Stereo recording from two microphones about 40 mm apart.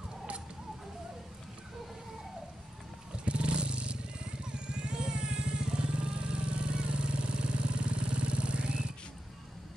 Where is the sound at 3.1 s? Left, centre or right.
Right.